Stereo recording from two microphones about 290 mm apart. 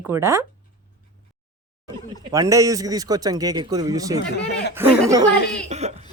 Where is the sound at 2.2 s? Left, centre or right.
Centre.